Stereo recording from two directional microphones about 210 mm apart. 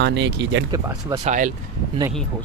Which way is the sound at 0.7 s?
15° right (ahead or behind).